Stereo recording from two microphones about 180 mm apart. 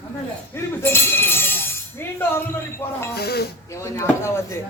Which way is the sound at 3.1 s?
60° left (ahead or behind).